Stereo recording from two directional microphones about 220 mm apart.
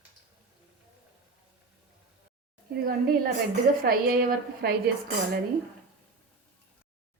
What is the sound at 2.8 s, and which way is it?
A woman's voice, 40° right (ahead or behind).